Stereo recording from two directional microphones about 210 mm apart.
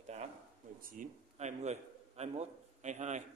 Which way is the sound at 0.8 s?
35° right (ahead or behind).